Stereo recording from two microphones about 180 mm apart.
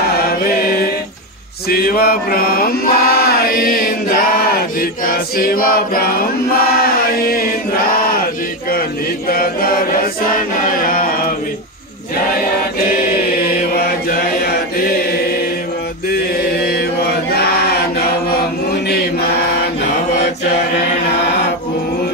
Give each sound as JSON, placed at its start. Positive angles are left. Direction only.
{"t": 0.2, "sound": "chant", "side_deg": 55}
{"t": 9.3, "sound": "chant", "side_deg": 55}
{"t": 10.9, "sound": "a sound", "side_deg": 50}
{"t": 13.3, "sound": "chant", "side_deg": 55}
{"t": 16.6, "sound": "chant", "side_deg": 60}